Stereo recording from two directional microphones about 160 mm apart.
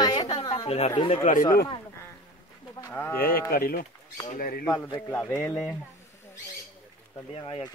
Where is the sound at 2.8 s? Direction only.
10° left (ahead or behind).